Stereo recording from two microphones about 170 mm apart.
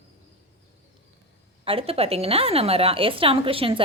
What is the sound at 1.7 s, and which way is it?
A woman's voice, 35° right (ahead or behind).